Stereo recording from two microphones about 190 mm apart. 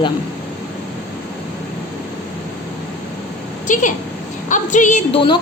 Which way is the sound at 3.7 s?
40° left (ahead or behind).